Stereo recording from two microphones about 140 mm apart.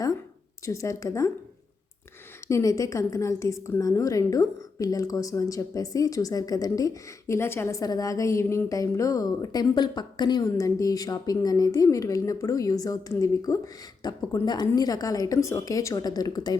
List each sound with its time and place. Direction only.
0.6 s a woman's voice: 20° left (ahead or behind)
2.5 s a woman's voice: 25° left (ahead or behind)